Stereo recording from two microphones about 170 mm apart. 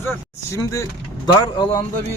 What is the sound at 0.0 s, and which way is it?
Speech, 15° left (ahead or behind).